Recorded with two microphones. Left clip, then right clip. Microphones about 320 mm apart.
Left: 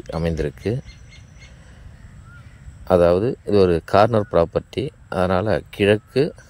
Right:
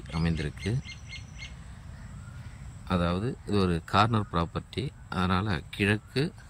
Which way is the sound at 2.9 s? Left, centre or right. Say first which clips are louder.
Left 15 dB; centre.